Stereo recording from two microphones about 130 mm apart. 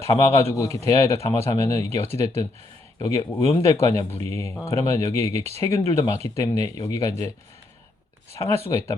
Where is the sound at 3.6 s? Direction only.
25° left (ahead or behind).